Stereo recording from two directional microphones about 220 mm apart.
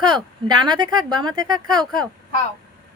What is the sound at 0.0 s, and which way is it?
Speech, 20° right (ahead or behind).